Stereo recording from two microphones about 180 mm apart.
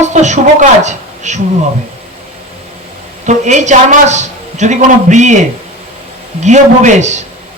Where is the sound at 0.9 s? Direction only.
40° right (ahead or behind).